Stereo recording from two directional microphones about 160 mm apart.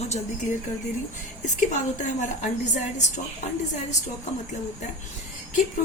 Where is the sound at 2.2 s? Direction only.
50° left (ahead or behind).